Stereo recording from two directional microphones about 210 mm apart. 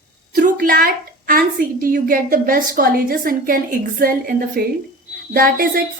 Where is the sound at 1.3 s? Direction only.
40° right (ahead or behind).